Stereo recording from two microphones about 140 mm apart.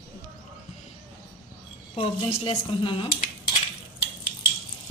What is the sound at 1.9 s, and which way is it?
A woman's voice, 40° left (ahead or behind).